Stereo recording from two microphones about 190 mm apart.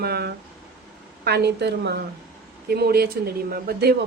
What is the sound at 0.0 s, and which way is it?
A woman's voice, 55° right (ahead or behind).